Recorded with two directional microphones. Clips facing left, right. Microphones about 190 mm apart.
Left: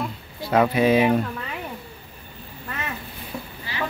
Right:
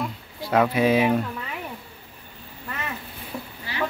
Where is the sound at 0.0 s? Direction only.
Centre (ahead or behind).